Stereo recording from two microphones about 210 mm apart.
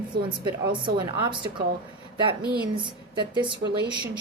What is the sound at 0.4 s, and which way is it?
A woman's voice, 20° right (ahead or behind).